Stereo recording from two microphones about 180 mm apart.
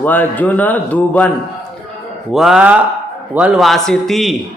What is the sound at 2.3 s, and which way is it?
Speech, centre (ahead or behind).